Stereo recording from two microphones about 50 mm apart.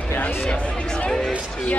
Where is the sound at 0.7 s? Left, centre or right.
Centre.